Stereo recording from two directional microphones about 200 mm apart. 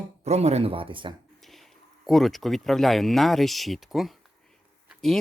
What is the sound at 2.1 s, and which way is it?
Speech, centre (ahead or behind).